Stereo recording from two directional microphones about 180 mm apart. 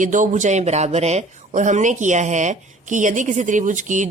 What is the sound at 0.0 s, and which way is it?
Speech, 45° right (ahead or behind).